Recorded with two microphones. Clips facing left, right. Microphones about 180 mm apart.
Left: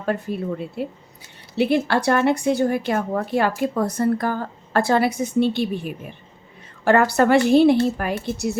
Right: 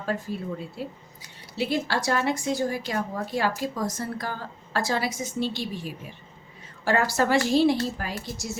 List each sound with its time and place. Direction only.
0.0 s a woman's voice: 60° left (ahead or behind)